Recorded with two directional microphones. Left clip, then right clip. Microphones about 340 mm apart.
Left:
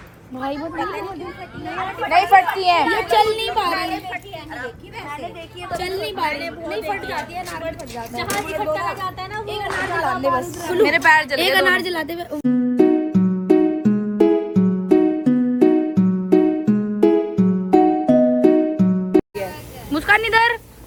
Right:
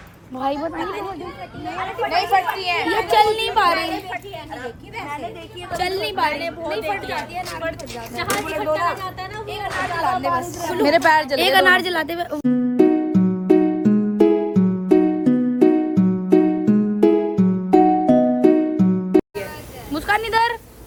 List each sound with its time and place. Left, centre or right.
0.3 s a woman's voice: centre
5.7 s a woman's voice: centre
10.9 s a woman's voice: centre
11.3 s music: centre
19.9 s a sound: centre